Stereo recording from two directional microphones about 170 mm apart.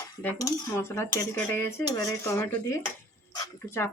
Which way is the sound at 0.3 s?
20° left (ahead or behind).